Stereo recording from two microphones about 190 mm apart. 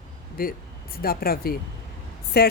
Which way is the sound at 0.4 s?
50° left (ahead or behind).